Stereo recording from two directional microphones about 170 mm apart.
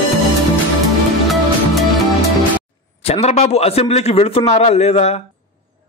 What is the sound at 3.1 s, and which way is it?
A man's voice, 40° left (ahead or behind).